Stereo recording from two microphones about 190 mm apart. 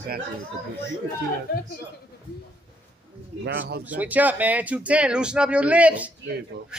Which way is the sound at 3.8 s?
10° right (ahead or behind).